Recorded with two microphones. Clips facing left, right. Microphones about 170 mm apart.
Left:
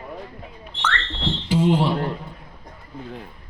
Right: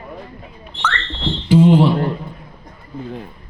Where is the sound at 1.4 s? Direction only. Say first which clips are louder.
Right 8 dB; 60° right (ahead or behind).